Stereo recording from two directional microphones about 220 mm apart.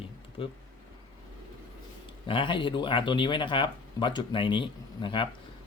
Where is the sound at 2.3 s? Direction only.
25° left (ahead or behind).